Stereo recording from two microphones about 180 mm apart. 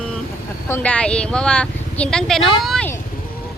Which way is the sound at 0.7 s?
10° left (ahead or behind).